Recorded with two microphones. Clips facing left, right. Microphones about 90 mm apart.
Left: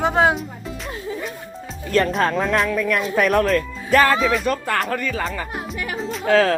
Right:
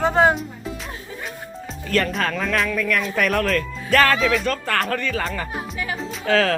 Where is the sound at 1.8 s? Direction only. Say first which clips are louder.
Left 3 dB; 20° left (ahead or behind).